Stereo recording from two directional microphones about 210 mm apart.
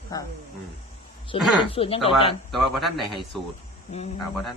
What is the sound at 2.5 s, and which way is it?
Speech, centre (ahead or behind).